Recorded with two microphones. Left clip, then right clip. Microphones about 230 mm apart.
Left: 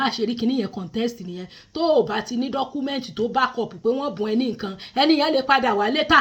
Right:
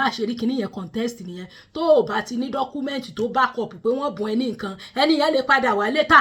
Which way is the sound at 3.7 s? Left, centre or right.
Centre.